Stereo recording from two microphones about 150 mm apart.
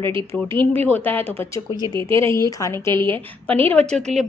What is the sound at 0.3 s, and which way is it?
A woman's voice, 15° left (ahead or behind).